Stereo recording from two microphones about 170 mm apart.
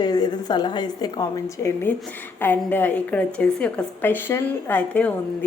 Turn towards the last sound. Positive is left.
turn(degrees=10)  # may be behind; listen again after turning